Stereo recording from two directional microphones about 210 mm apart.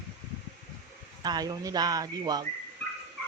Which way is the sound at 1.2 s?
20° right (ahead or behind).